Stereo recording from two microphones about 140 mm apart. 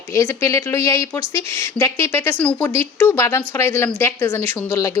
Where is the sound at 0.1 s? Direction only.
20° left (ahead or behind).